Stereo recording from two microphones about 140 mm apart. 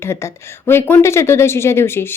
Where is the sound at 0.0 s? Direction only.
20° left (ahead or behind).